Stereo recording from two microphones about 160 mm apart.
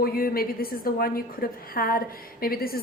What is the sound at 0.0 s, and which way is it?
A woman's voice, 65° left (ahead or behind).